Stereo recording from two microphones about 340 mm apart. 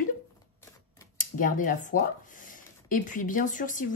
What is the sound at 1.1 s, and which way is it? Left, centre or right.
Speech, left.